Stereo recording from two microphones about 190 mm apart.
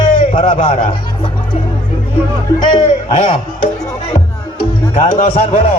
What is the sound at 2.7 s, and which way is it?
Speech, 30° left (ahead or behind).